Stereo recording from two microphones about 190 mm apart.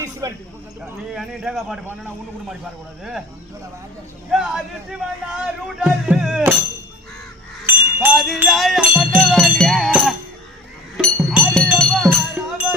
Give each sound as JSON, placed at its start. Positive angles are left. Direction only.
{"t": 0.0, "sound": "a sound", "side_deg": -20}
{"t": 1.1, "sound": "speech", "side_deg": 0}
{"t": 3.0, "sound": "speech", "side_deg": -5}
{"t": 4.3, "sound": "speech", "side_deg": 0}
{"t": 7.7, "sound": "jingle bell", "side_deg": -10}
{"t": 8.1, "sound": "speech", "side_deg": 0}
{"t": 8.4, "sound": "music", "side_deg": 0}